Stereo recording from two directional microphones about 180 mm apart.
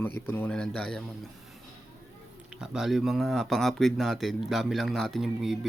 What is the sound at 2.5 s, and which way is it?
Speech, 5° right (ahead or behind).